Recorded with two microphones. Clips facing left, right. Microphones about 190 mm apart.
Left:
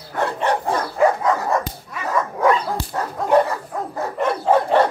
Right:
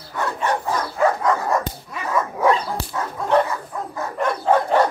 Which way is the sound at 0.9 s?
5° left (ahead or behind).